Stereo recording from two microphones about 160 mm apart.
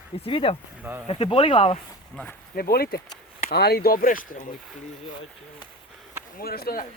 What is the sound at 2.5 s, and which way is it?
Speech, 70° left (ahead or behind).